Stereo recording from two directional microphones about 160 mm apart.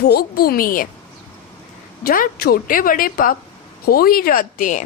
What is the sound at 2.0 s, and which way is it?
Speech, 70° left (ahead or behind).